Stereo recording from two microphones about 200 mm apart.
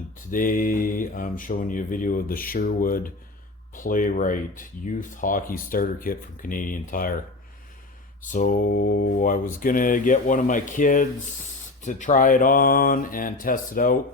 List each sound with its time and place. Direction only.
0.3 s speech: 45° left (ahead or behind)
8.2 s speech: 40° left (ahead or behind)